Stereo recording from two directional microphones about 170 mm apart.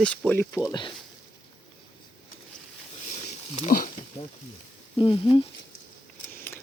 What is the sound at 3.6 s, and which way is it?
Speech, 55° left (ahead or behind).